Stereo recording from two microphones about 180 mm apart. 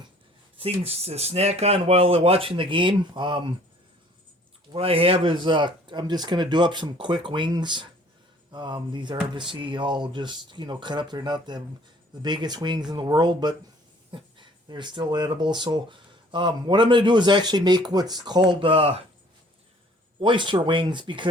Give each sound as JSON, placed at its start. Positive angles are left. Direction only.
{"t": 0.6, "sound": "speech", "side_deg": -35}
{"t": 4.7, "sound": "speech", "side_deg": -30}
{"t": 20.1, "sound": "speech", "side_deg": -25}